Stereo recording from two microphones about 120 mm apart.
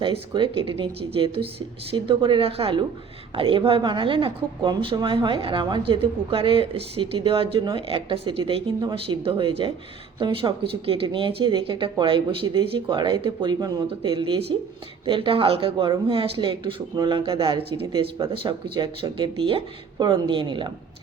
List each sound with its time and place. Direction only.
0.0 s a woman's voice: 45° right (ahead or behind)